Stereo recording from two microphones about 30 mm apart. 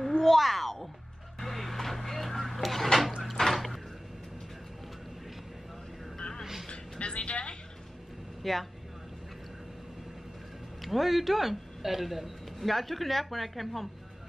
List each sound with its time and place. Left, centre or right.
0.2 s a sound: centre
3.3 s drip: centre
6.1 s a sound: left
6.7 s music: left
8.4 s speech: centre
10.8 s speech: centre